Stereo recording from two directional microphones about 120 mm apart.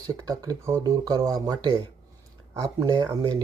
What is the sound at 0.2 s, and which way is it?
Speech, 30° right (ahead or behind).